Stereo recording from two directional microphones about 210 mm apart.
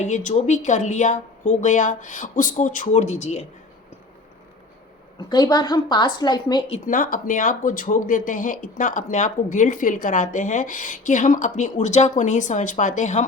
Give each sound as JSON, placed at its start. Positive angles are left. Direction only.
{"t": 0.0, "sound": "speech", "side_deg": 35}
{"t": 5.3, "sound": "a woman's voice", "side_deg": 20}
{"t": 6.8, "sound": "speech", "side_deg": 40}